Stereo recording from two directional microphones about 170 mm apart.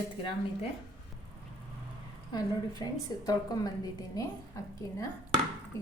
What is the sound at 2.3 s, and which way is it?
A woman's voice, 25° left (ahead or behind).